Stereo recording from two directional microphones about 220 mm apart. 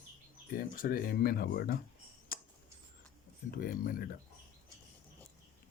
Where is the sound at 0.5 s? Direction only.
40° left (ahead or behind).